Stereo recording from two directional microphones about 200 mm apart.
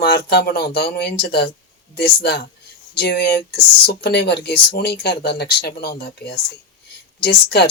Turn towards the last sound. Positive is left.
turn(degrees=50)  # may be behind; listen again after turning